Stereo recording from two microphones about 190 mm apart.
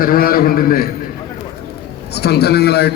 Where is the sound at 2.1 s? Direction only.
60° left (ahead or behind).